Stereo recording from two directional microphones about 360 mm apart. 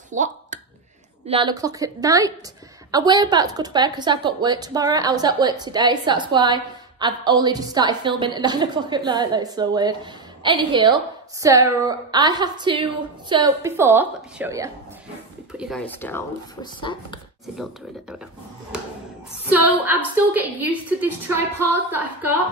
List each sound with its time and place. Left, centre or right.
0.1 s a sound: centre
1.2 s a woman's voice: centre
19.5 s a woman's voice: centre